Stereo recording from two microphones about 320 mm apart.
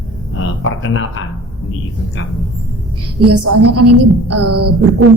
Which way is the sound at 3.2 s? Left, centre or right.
Right.